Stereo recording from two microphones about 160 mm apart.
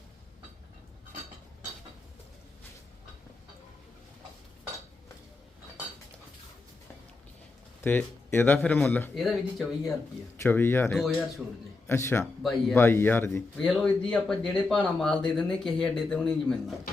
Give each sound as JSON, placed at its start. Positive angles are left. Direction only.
{"t": 7.9, "sound": "speech", "side_deg": 10}
{"t": 9.1, "sound": "speech", "side_deg": 0}
{"t": 10.3, "sound": "speech", "side_deg": 15}
{"t": 11.4, "sound": "speech", "side_deg": -5}
{"t": 11.9, "sound": "speech", "side_deg": 15}
{"t": 12.2, "sound": "speech", "side_deg": 0}
{"t": 12.7, "sound": "speech", "side_deg": 15}